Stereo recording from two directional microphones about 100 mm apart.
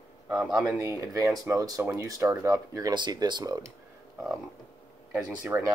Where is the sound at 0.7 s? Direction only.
35° right (ahead or behind).